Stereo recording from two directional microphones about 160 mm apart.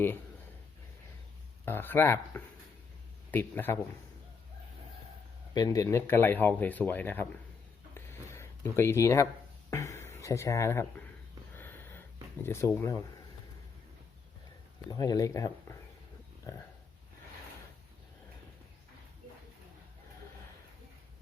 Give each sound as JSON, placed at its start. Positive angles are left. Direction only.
{"t": 1.6, "sound": "speech", "side_deg": 15}
{"t": 5.5, "sound": "speech", "side_deg": 20}
{"t": 7.9, "sound": "a sound", "side_deg": 15}
{"t": 9.6, "sound": "speech", "side_deg": 15}
{"t": 11.5, "sound": "a sound", "side_deg": 15}
{"t": 14.8, "sound": "speech", "side_deg": 25}